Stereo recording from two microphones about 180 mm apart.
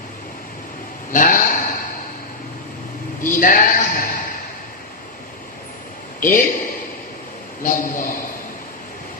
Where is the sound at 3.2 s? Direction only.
50° left (ahead or behind).